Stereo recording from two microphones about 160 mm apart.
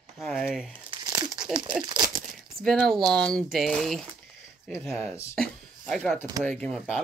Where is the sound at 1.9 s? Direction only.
25° right (ahead or behind).